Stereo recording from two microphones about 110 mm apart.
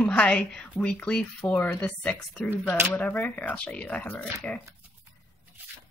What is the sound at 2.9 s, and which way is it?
A woman's voice, 15° left (ahead or behind).